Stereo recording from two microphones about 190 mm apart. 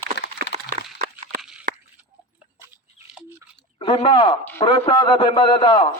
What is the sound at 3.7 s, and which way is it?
Speech, 25° left (ahead or behind).